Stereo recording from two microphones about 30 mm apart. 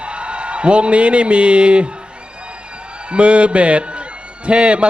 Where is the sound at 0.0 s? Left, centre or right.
Right.